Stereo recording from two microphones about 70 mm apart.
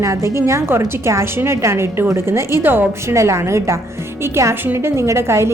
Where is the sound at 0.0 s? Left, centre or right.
Right.